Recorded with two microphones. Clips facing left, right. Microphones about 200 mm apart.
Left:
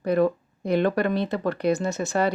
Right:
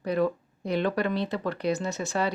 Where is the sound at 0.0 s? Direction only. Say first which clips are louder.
Left 4 dB; 50° left (ahead or behind).